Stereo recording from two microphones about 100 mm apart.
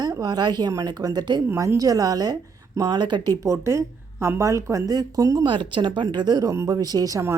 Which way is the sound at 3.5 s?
30° right (ahead or behind).